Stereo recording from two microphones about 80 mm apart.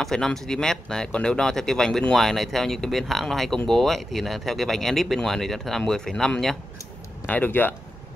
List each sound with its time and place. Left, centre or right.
0.0 s speech: centre
7.2 s speech: left